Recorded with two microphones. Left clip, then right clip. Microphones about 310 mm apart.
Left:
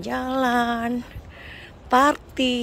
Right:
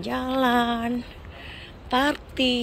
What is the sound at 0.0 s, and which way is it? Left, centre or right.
Speech, centre.